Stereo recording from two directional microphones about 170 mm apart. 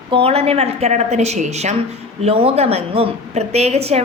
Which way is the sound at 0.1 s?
35° right (ahead or behind).